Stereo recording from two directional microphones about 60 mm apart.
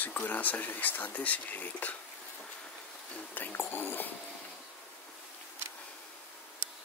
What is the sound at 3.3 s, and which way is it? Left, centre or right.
Speech, left.